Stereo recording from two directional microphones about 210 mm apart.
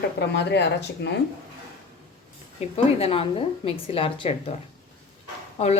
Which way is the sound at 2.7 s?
25° left (ahead or behind).